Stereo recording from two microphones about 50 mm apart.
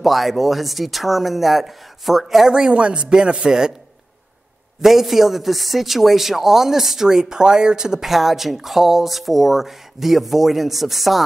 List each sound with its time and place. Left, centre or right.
0.0 s a man's voice: centre
2.6 s a man's voice: right
4.8 s a man's voice: centre